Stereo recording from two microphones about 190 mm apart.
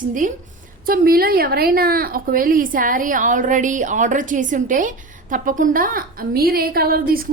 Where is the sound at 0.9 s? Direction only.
50° right (ahead or behind).